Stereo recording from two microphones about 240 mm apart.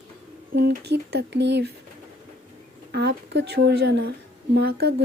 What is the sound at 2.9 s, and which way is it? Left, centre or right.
Speech, right.